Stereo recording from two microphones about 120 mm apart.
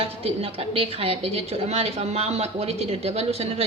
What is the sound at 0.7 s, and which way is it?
A woman's voice, 55° right (ahead or behind).